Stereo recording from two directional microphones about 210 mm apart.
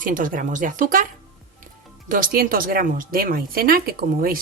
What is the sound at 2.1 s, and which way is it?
A woman's voice, 40° right (ahead or behind).